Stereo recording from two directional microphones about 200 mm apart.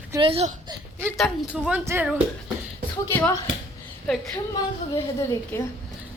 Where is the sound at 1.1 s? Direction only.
Centre (ahead or behind).